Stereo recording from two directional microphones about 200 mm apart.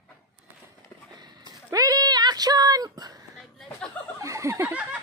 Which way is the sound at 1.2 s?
20° right (ahead or behind).